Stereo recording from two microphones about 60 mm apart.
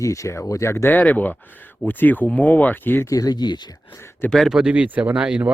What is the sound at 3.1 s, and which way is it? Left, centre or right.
Speech, left.